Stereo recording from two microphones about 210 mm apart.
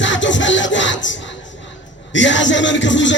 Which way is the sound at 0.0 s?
60° left (ahead or behind).